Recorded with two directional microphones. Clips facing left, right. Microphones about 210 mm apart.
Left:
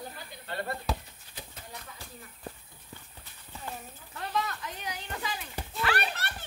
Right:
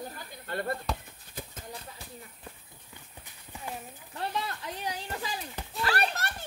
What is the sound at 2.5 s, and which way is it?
Horse, 35° left (ahead or behind).